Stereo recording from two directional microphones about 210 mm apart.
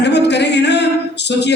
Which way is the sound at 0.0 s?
55° left (ahead or behind).